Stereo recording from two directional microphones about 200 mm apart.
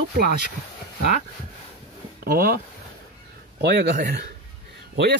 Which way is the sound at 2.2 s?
45° right (ahead or behind).